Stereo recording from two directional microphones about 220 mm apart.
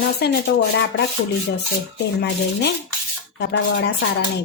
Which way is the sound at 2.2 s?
50° left (ahead or behind).